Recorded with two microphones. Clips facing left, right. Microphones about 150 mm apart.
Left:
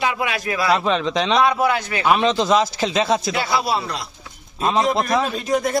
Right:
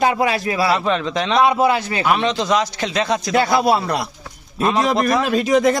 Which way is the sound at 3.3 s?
50° right (ahead or behind).